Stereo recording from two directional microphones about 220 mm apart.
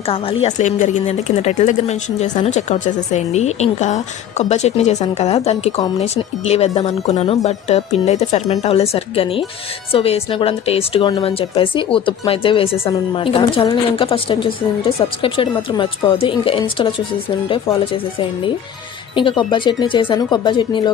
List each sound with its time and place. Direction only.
0.0 s speech: 25° left (ahead or behind)
19.1 s speech: 20° left (ahead or behind)